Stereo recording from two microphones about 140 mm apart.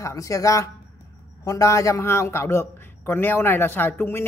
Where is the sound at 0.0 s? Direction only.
25° left (ahead or behind).